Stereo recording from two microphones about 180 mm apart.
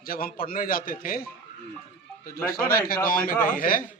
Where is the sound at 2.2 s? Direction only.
55° left (ahead or behind).